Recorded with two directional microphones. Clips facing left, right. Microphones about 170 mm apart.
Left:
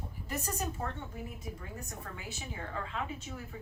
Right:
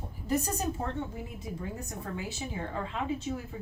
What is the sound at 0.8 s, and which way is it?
Speech, 25° right (ahead or behind).